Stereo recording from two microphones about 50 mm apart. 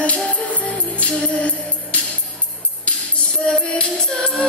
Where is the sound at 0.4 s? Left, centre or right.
Left.